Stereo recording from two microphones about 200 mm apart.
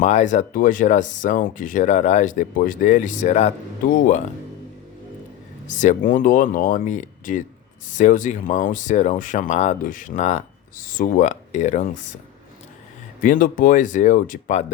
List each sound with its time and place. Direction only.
0.0 s speech: 35° left (ahead or behind)
5.6 s speech: 40° left (ahead or behind)
13.2 s speech: 45° left (ahead or behind)